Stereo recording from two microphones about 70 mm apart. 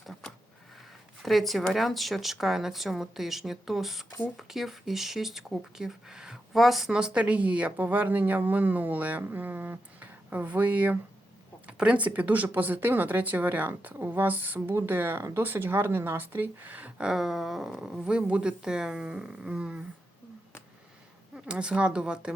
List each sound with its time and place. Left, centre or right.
0.1 s a sound: centre
1.2 s speech: centre
6.9 s a woman's voice: centre
17.0 s speech: centre
21.3 s speech: centre